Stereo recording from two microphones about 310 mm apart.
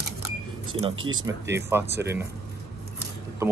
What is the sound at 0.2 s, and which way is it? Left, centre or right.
Vehicle, centre.